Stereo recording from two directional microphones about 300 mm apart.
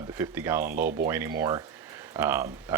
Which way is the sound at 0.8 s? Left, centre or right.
Right.